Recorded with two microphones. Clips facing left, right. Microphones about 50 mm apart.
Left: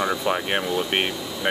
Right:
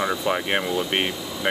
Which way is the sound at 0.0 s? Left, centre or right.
Centre.